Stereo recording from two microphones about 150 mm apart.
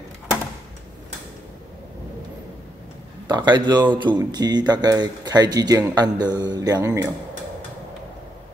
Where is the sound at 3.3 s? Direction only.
30° right (ahead or behind).